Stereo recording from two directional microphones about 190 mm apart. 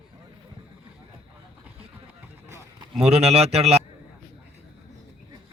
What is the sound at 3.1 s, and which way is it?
Speech, 30° right (ahead or behind).